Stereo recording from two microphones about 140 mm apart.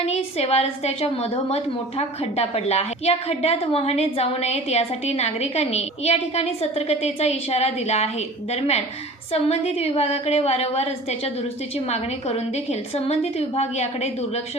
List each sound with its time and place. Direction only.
0.1 s a woman's voice: 45° left (ahead or behind)
13.6 s a woman's voice: 50° left (ahead or behind)